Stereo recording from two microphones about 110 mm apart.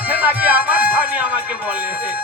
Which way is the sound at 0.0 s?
15° right (ahead or behind).